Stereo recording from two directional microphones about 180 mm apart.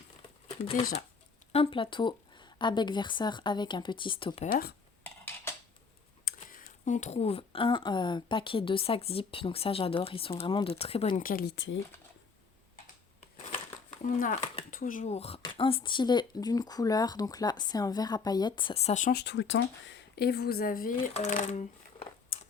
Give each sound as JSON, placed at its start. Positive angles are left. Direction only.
{"t": 1.5, "sound": "speech", "side_deg": 30}
{"t": 5.0, "sound": "a sound", "side_deg": 10}
{"t": 6.2, "sound": "speech", "side_deg": 50}
{"t": 11.2, "sound": "speech", "side_deg": 50}
{"t": 11.5, "sound": "speech", "side_deg": 90}
{"t": 13.3, "sound": "crushing", "side_deg": 45}
{"t": 14.0, "sound": "speech", "side_deg": 50}
{"t": 19.1, "sound": "a woman's voice", "side_deg": 75}